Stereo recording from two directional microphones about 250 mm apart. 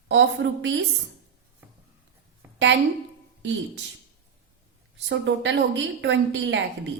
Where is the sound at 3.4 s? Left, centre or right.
Right.